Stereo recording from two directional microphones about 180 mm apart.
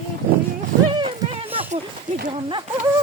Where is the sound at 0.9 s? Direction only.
30° right (ahead or behind).